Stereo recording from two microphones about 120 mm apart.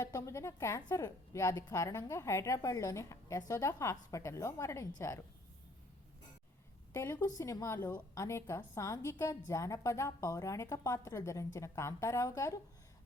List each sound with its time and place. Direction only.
0.0 s a woman's voice: 30° left (ahead or behind)
6.9 s a woman's voice: 20° left (ahead or behind)